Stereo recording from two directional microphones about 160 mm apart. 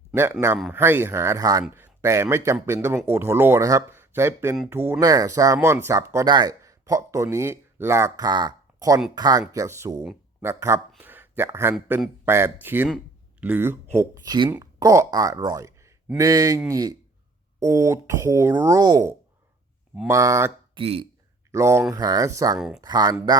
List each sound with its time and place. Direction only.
0.1 s speech: 15° right (ahead or behind)
20.7 s speech: 35° right (ahead or behind)
21.5 s speech: 15° right (ahead or behind)
22.5 s speech: 5° right (ahead or behind)
22.8 s speech: 25° right (ahead or behind)